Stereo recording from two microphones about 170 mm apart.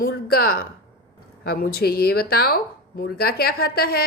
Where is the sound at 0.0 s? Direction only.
65° left (ahead or behind).